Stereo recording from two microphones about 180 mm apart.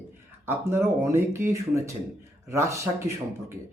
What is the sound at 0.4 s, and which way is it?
Speech, 15° right (ahead or behind).